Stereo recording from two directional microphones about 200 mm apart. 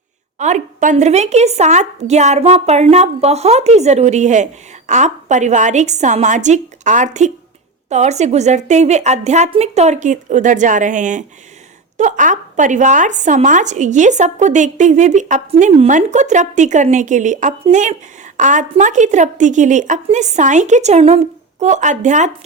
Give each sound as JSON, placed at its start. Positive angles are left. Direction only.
{"t": 0.3, "sound": "speech", "side_deg": -35}